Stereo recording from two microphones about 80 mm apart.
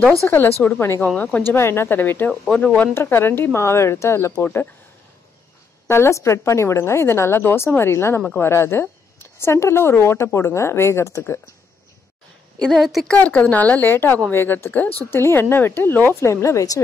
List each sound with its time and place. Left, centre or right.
0.3 s speech: left
1.0 s speech: centre
1.4 s speech: left
2.5 s speech: centre
2.9 s a woman's voice: left
5.9 s a woman's voice: left
12.5 s a woman's voice: centre; by 16.8 s left